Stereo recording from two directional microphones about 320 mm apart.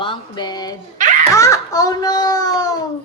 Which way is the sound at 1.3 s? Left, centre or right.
Centre.